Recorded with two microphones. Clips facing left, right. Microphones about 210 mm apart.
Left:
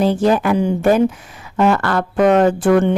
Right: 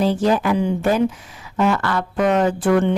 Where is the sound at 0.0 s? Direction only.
55° left (ahead or behind).